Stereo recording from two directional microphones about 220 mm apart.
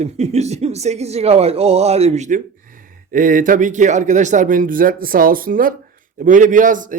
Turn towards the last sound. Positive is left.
turn(degrees=-35)  # may be behind; listen again after turning